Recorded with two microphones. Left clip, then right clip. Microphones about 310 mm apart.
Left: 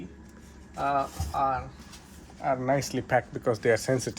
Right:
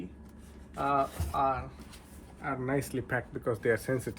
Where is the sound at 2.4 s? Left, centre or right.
Centre.